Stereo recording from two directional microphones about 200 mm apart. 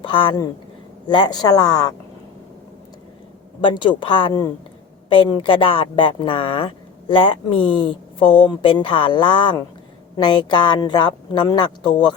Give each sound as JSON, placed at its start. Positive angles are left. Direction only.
{"t": 0.0, "sound": "speech", "side_deg": 25}
{"t": 3.7, "sound": "speech", "side_deg": 25}